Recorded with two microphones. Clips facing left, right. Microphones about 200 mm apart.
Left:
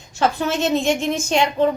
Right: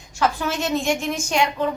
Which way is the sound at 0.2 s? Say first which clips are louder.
Left 3 dB; 25° left (ahead or behind).